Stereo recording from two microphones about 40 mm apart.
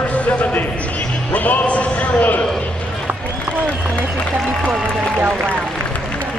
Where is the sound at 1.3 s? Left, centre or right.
Left.